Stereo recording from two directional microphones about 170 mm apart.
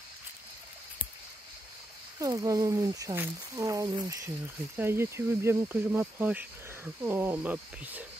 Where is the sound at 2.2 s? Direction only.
20° right (ahead or behind).